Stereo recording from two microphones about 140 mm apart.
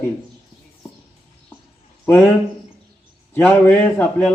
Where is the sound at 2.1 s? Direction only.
10° left (ahead or behind).